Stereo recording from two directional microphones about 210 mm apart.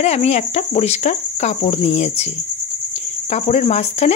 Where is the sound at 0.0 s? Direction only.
30° left (ahead or behind).